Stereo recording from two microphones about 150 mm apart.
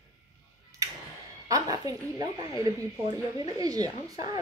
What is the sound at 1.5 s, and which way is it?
Speech, 25° right (ahead or behind).